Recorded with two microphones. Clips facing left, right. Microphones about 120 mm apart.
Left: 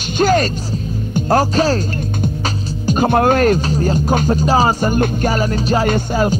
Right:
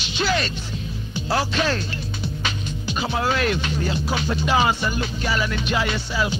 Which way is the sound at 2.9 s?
50° left (ahead or behind).